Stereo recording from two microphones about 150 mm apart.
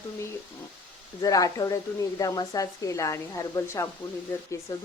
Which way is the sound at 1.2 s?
25° left (ahead or behind).